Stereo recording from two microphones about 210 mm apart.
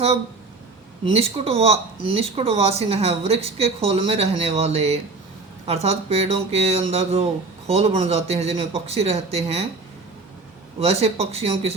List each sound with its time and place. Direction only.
1.1 s speech: 30° right (ahead or behind)
10.8 s speech: 30° right (ahead or behind)